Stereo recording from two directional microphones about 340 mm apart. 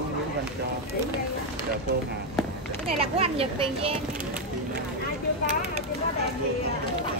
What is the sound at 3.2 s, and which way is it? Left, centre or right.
Speech, centre.